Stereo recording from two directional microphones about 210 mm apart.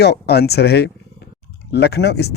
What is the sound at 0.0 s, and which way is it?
Speech, 50° left (ahead or behind).